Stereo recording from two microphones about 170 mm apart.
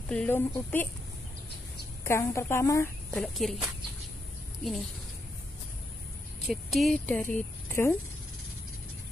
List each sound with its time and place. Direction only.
0.1 s a woman's voice: 5° left (ahead or behind)
2.0 s a woman's voice: 15° left (ahead or behind)
3.2 s speech: centre (ahead or behind)
6.4 s a woman's voice: centre (ahead or behind)